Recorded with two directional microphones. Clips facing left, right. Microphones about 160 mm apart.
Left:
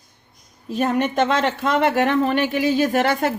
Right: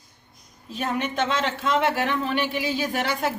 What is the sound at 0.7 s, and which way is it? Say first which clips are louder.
Speech: left 7 dB; 45° left (ahead or behind).